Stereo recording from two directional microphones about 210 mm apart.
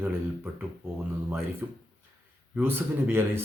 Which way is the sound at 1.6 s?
10° right (ahead or behind).